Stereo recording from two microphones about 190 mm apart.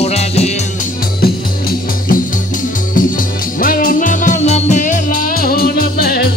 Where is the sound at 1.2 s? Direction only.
50° left (ahead or behind).